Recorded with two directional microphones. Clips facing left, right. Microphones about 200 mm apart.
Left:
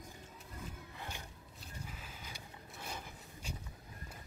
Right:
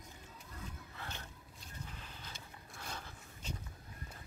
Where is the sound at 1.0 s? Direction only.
10° left (ahead or behind).